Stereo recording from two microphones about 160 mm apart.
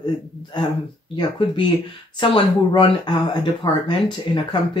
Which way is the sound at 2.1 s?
30° left (ahead or behind).